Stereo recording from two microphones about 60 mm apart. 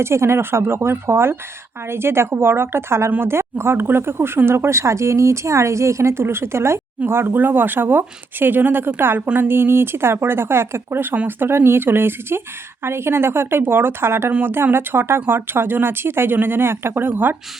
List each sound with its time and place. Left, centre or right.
0.0 s speech: right